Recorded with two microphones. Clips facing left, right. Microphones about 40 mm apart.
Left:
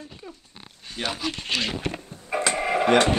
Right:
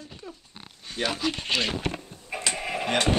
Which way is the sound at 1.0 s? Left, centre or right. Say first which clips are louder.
Right 1 dB; centre.